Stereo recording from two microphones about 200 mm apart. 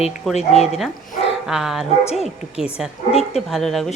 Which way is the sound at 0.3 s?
30° left (ahead or behind).